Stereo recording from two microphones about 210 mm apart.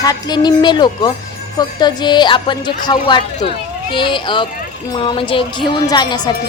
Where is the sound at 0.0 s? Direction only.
20° left (ahead or behind).